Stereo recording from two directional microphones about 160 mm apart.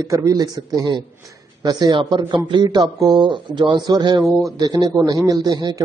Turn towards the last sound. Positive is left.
turn(degrees=-25)  # may be behind; listen again after turning